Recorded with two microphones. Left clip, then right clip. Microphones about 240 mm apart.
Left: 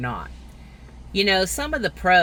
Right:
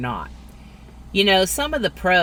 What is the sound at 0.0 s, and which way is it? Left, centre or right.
Speech, centre.